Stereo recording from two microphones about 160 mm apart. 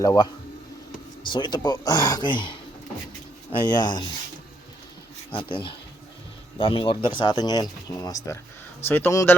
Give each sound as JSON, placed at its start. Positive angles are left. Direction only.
{"t": 0.0, "sound": "speech", "side_deg": 20}
{"t": 3.7, "sound": "speech", "side_deg": 25}
{"t": 5.3, "sound": "speech", "side_deg": 35}